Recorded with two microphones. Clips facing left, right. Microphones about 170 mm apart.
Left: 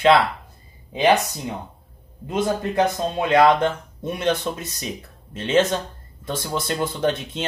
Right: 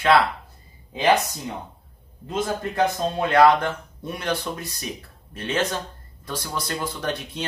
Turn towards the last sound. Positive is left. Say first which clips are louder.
# left 6 dB
turn(degrees=25)  # may be behind; listen again after turning